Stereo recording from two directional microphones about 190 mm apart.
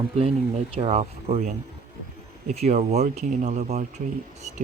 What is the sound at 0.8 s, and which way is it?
Speech, 30° right (ahead or behind).